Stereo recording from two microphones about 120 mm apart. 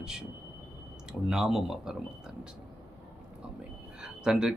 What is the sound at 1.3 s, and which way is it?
Speech, centre (ahead or behind).